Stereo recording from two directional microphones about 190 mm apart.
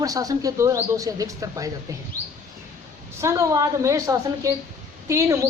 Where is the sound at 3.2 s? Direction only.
15° right (ahead or behind).